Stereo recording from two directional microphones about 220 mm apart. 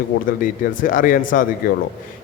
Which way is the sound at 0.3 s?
40° left (ahead or behind).